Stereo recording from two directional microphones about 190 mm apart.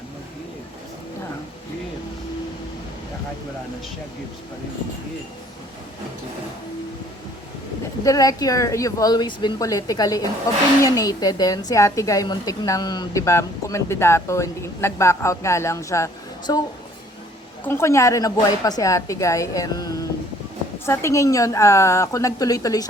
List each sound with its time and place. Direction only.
8.0 s a woman's voice: 20° left (ahead or behind)